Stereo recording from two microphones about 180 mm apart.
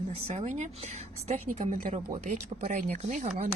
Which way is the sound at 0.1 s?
40° right (ahead or behind).